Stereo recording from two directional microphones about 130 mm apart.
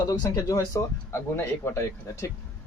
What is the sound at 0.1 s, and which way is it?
Speech, 25° left (ahead or behind).